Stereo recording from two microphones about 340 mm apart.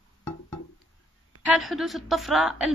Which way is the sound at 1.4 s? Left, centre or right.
Centre.